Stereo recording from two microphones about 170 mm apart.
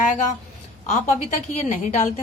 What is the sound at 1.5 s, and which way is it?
Speech, 45° left (ahead or behind).